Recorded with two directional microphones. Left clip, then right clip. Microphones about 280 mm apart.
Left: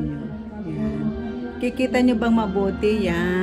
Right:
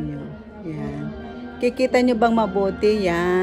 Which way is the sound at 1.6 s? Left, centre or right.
Centre.